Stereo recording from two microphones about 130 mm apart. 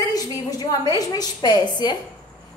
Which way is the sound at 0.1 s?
30° left (ahead or behind).